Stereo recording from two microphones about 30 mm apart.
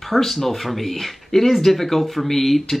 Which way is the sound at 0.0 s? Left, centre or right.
Centre.